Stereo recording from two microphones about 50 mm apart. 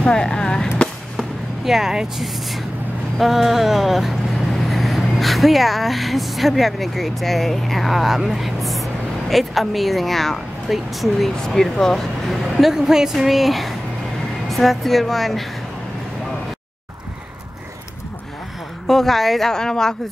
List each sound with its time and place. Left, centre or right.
0.0 s speech: centre
1.1 s a sound: centre
2.1 s a woman's voice: centre
12.7 s a woman's voice: centre
18.9 s speech: centre